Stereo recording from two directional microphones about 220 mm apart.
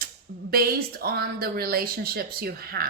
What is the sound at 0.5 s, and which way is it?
A woman's voice, 45° right (ahead or behind).